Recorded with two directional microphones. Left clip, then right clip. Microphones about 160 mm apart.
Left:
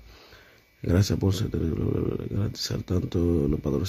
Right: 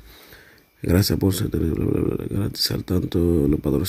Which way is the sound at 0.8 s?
15° right (ahead or behind).